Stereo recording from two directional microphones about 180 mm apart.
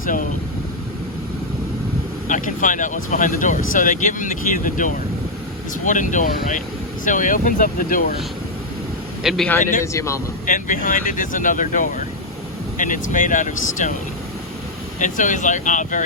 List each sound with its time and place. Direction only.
0.0 s speech: 50° left (ahead or behind)
2.2 s speech: 45° left (ahead or behind)
9.2 s a man's voice: centre (ahead or behind)
10.4 s speech: 45° left (ahead or behind)
14.9 s speech: 45° left (ahead or behind)